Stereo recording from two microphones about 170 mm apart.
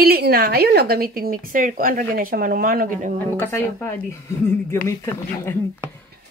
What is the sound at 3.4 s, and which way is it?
Speech, 15° left (ahead or behind).